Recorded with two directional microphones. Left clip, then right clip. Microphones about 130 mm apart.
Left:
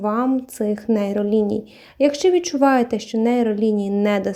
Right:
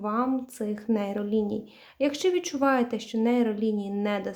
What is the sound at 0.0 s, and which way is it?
Speech, 45° left (ahead or behind).